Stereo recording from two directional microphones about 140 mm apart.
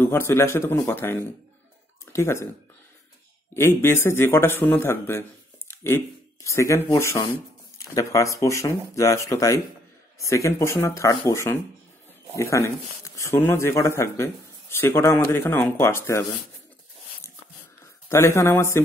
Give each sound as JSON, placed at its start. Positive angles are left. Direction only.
{"t": 0.0, "sound": "speech", "side_deg": 15}
{"t": 3.5, "sound": "speech", "side_deg": 20}
{"t": 18.0, "sound": "speech", "side_deg": 20}